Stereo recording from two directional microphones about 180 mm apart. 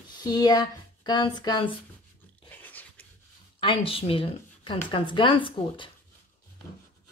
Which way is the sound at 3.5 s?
30° left (ahead or behind).